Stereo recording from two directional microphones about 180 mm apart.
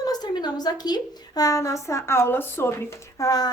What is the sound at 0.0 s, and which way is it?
A woman's voice, 20° left (ahead or behind).